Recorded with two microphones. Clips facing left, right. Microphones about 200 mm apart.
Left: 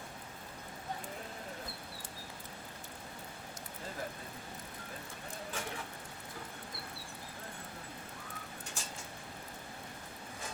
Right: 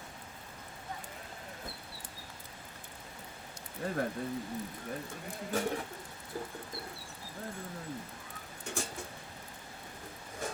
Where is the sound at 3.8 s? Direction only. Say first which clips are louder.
Right 10 dB; 65° right (ahead or behind).